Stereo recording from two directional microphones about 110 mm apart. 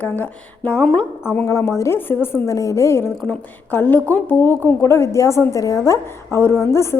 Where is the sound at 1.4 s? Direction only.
25° left (ahead or behind).